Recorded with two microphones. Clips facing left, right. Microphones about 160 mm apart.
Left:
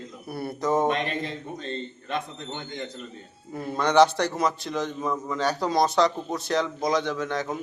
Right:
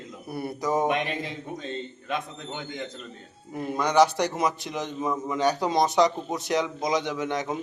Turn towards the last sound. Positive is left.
turn(degrees=-15)  # may be behind; listen again after turning